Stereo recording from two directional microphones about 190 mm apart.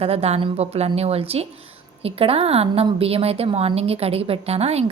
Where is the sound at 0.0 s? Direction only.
30° right (ahead or behind).